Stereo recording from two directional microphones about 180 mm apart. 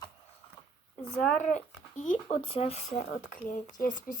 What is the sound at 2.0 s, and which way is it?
Speech, 40° left (ahead or behind).